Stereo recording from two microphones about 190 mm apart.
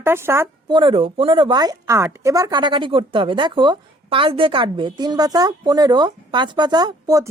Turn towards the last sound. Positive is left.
turn(degrees=-20)  # may be behind; listen again after turning